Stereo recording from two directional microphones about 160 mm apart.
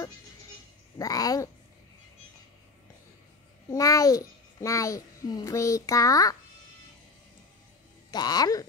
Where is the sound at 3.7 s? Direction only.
20° left (ahead or behind).